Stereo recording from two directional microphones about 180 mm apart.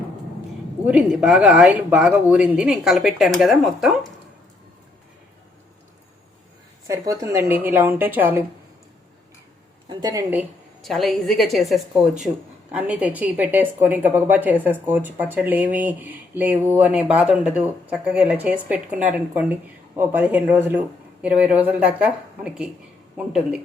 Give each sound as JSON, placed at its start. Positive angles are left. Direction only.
{"t": 0.9, "sound": "speech", "side_deg": -5}
{"t": 6.8, "sound": "a woman's voice", "side_deg": -20}
{"t": 9.9, "sound": "a woman's voice", "side_deg": -20}
{"t": 10.8, "sound": "a woman's voice", "side_deg": 0}